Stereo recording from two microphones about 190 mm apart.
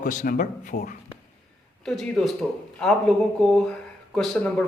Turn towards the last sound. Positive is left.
turn(degrees=5)  # may be behind; listen again after turning